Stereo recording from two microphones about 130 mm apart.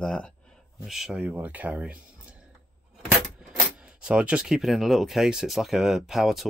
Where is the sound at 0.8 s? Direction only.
Centre (ahead or behind).